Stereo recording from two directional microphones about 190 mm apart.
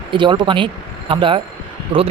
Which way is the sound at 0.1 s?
25° right (ahead or behind).